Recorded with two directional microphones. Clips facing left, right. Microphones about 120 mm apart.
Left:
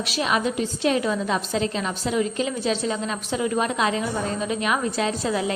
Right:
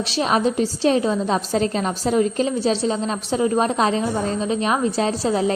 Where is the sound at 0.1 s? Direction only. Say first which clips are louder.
Right 4 dB; 35° right (ahead or behind).